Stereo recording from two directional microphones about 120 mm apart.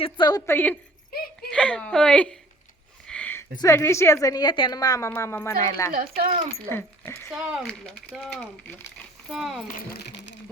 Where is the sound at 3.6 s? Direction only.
25° left (ahead or behind); by 4.8 s 40° left (ahead or behind).